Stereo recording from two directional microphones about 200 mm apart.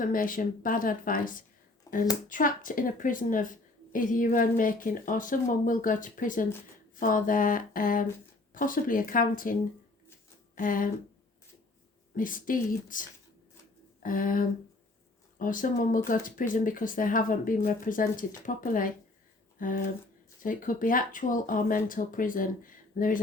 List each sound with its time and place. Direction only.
0.0 s a woman's voice: 45° left (ahead or behind)
1.9 s a sound: 20° left (ahead or behind)
2.3 s a woman's voice: 45° left (ahead or behind)
12.1 s a woman's voice: 40° left (ahead or behind)